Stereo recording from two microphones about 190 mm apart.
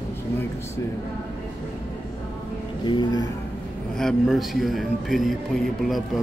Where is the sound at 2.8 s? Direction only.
25° left (ahead or behind).